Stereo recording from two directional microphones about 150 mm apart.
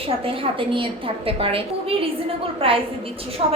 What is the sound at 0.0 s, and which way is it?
A woman's voice, 40° right (ahead or behind).